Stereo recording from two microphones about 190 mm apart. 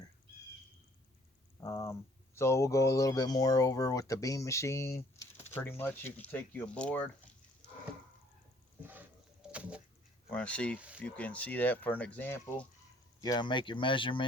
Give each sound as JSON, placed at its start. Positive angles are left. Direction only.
{"t": 1.6, "sound": "speech", "side_deg": 15}
{"t": 8.8, "sound": "a sound", "side_deg": -10}
{"t": 10.2, "sound": "speech", "side_deg": 5}
{"t": 10.8, "sound": "speech", "side_deg": -5}
{"t": 11.0, "sound": "speech", "side_deg": 5}
{"t": 13.2, "sound": "speech", "side_deg": 20}